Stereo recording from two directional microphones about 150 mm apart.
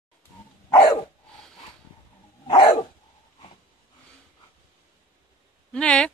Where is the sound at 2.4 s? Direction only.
30° left (ahead or behind).